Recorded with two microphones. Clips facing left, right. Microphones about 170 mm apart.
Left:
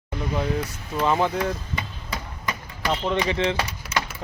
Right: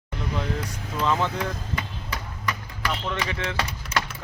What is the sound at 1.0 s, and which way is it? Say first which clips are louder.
Speech: left 3 dB; 15° left (ahead or behind).